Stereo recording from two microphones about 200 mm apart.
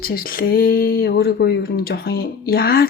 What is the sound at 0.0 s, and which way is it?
Speech, 50° left (ahead or behind).